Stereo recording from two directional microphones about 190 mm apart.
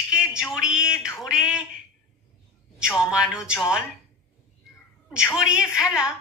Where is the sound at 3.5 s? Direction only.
15° left (ahead or behind).